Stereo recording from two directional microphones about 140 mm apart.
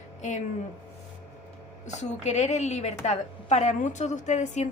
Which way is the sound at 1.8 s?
55° left (ahead or behind).